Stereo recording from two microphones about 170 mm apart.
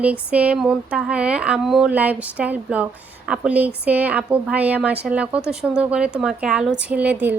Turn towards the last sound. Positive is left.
turn(degrees=-10)  # may be behind; listen again after turning